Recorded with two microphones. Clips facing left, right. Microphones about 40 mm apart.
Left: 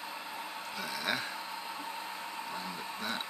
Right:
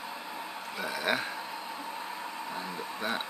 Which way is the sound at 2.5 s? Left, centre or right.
Right.